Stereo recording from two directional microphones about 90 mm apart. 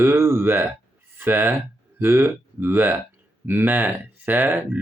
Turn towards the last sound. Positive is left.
turn(degrees=-20)  # may be behind; listen again after turning